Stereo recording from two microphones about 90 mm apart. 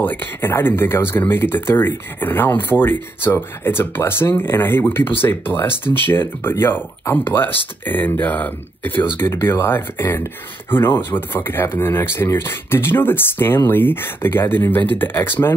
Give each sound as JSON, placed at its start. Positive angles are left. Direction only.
{"t": 0.0, "sound": "speech", "side_deg": 20}